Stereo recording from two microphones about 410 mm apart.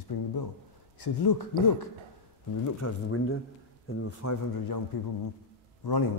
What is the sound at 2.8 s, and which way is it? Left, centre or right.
Speech, left.